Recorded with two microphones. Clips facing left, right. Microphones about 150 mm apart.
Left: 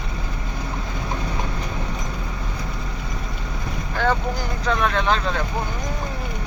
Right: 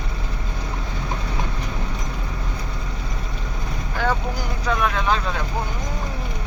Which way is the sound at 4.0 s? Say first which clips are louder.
Left 2 dB; 10° right (ahead or behind).